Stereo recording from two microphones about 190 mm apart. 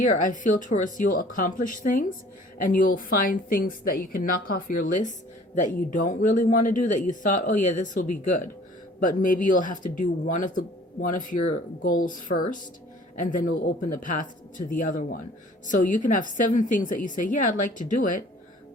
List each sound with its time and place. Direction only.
0.0 s speech: 40° left (ahead or behind)
11.8 s speech: 45° left (ahead or behind)